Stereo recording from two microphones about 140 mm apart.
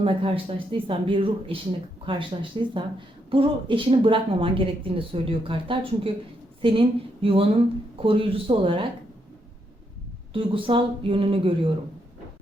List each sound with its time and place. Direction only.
0.0 s speech: 40° right (ahead or behind)
6.6 s a sound: 40° right (ahead or behind)
7.9 s speech: 40° right (ahead or behind)
10.3 s speech: 40° right (ahead or behind)